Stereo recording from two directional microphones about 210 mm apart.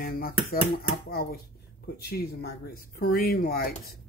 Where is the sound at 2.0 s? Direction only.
50° left (ahead or behind).